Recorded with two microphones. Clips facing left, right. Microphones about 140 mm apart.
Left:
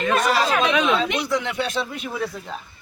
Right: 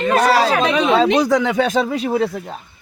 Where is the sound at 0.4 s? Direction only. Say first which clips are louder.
Right 4 dB; 35° right (ahead or behind).